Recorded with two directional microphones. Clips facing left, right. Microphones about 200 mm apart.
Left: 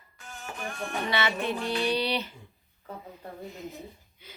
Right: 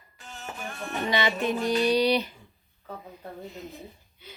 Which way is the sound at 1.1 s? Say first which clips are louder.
Right 4 dB; 15° right (ahead or behind).